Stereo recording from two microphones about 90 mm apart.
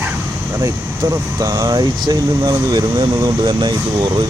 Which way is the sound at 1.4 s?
40° right (ahead or behind).